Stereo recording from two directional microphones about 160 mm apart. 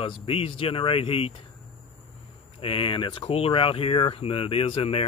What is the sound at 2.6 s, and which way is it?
Speech, 35° left (ahead or behind).